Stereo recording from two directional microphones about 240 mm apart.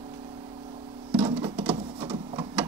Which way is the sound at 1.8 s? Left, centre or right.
Right.